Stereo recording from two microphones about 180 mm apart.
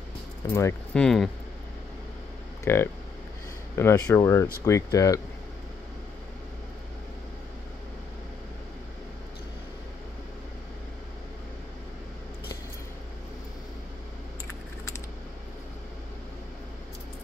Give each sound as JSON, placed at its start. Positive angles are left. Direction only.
{"t": 0.5, "sound": "speech", "side_deg": 15}
{"t": 0.9, "sound": "speech", "side_deg": 5}
{"t": 2.6, "sound": "speech", "side_deg": 15}